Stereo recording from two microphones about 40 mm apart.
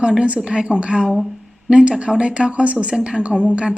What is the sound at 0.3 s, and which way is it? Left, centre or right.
A woman's voice, right.